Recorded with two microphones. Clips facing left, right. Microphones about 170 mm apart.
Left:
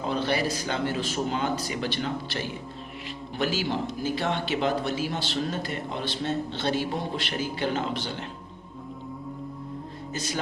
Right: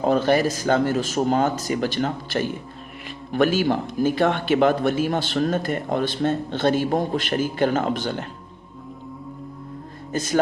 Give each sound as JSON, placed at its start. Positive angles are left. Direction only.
{"t": 0.0, "sound": "a man's voice", "side_deg": -45}
{"t": 10.1, "sound": "speech", "side_deg": -50}